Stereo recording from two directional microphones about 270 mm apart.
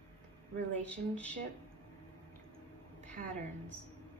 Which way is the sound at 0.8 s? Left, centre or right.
Centre.